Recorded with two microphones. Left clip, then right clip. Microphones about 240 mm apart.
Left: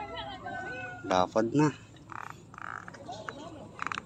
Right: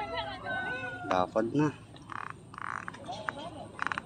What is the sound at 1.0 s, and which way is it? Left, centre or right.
Speech, centre.